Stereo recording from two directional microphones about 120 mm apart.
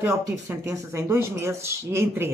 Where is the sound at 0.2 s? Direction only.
25° right (ahead or behind).